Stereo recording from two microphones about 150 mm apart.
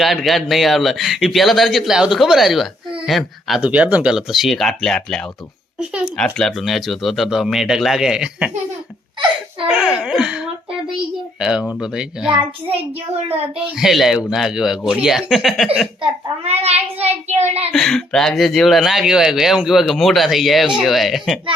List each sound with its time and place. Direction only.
0.0 s speech: centre (ahead or behind)
5.8 s a child's voice: 5° right (ahead or behind)
6.1 s speech: 5° left (ahead or behind)
9.6 s speech: 5° right (ahead or behind)
12.6 s a child's voice: 40° right (ahead or behind)
13.7 s speech: centre (ahead or behind)
16.0 s a child's voice: 45° right (ahead or behind)
17.7 s speech: 5° left (ahead or behind)